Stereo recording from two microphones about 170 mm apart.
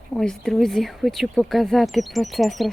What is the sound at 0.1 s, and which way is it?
Speech, 5° left (ahead or behind).